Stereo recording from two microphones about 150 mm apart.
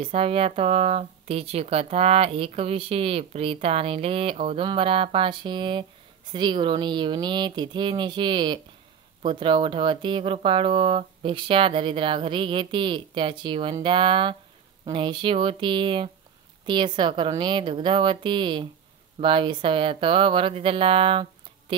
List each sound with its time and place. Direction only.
0.0 s speech: 40° right (ahead or behind)